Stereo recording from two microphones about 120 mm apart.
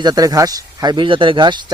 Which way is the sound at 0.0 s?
30° right (ahead or behind).